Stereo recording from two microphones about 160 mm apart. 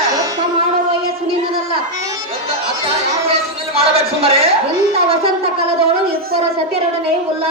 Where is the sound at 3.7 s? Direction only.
35° right (ahead or behind).